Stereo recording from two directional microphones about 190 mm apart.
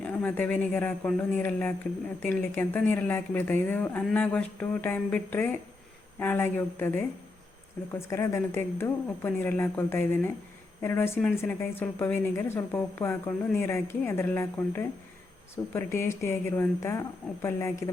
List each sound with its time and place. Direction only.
0.0 s speech: 10° left (ahead or behind)